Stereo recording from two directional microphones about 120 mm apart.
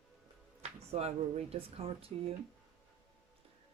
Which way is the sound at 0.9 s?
60° right (ahead or behind).